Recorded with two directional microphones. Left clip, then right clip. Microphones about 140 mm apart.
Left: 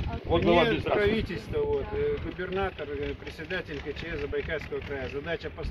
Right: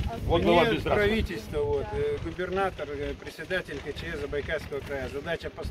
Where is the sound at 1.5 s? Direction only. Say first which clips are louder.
Even; 30° right (ahead or behind).